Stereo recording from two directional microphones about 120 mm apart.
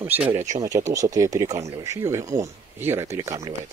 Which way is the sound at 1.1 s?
30° right (ahead or behind).